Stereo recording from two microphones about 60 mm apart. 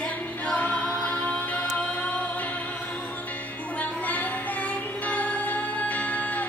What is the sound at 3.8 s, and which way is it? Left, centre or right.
Music, left.